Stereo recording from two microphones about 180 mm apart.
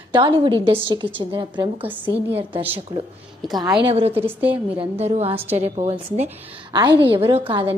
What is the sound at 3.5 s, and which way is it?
Speech, 20° right (ahead or behind).